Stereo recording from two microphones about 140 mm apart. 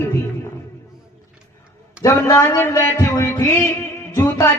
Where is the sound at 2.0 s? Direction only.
20° left (ahead or behind).